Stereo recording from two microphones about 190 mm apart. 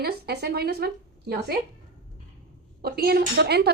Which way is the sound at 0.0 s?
55° right (ahead or behind).